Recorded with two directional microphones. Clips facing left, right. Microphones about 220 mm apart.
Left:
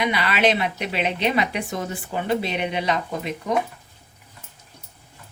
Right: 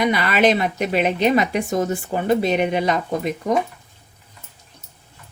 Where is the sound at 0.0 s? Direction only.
45° right (ahead or behind).